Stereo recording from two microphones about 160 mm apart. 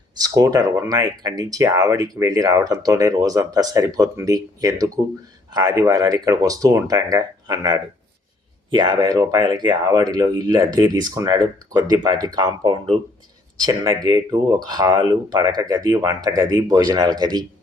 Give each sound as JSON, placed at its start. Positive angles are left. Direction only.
{"t": 0.2, "sound": "speech", "side_deg": -20}